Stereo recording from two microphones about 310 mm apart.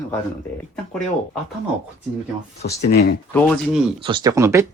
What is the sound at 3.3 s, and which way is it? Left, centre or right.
Speech, centre.